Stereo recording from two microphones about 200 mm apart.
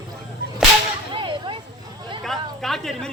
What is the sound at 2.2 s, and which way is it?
Speech, centre (ahead or behind).